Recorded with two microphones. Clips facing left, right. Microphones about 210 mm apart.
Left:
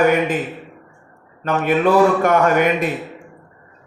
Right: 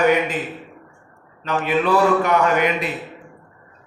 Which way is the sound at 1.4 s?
50° left (ahead or behind).